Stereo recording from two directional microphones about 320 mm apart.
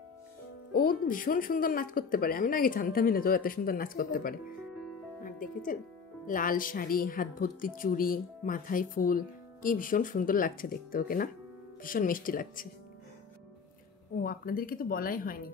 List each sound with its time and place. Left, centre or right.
0.7 s speech: left
5.2 s music: left
6.2 s speech: left
14.1 s speech: left